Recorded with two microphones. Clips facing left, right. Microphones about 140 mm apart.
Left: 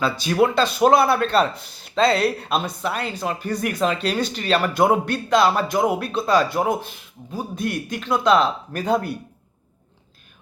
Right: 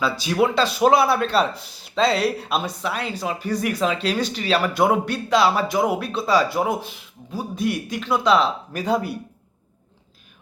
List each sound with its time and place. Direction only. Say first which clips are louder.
0.0 s speech: left 1 dB; centre (ahead or behind)